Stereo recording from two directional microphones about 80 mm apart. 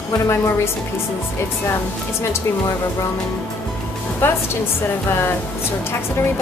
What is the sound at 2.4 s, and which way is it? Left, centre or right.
Speech, left.